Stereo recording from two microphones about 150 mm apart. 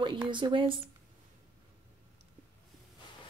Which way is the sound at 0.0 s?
30° right (ahead or behind).